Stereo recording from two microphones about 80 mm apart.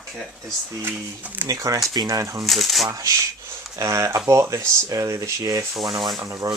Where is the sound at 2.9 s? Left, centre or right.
Right.